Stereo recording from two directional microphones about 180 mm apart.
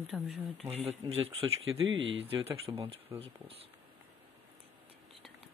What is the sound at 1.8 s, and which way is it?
Speech, 90° right.